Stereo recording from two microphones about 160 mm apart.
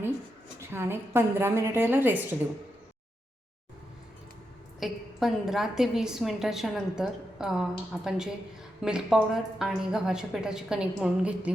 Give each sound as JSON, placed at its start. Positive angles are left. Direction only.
{"t": 0.7, "sound": "a woman's voice", "side_deg": -15}
{"t": 4.8, "sound": "a woman's voice", "side_deg": 0}